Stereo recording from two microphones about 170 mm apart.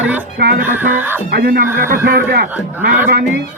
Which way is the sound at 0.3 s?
70° right (ahead or behind).